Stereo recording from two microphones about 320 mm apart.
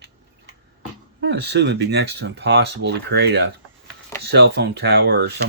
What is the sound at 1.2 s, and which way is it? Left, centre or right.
Speech, right.